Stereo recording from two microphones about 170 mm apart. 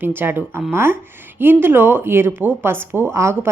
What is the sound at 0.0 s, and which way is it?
Speech, 10° right (ahead or behind).